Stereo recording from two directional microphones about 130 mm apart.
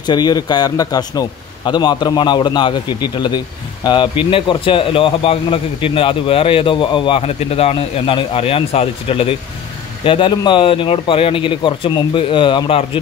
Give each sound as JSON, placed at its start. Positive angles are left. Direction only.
{"t": 0.0, "sound": "a man's voice", "side_deg": 35}